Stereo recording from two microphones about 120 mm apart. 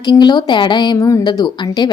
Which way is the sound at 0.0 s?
40° left (ahead or behind).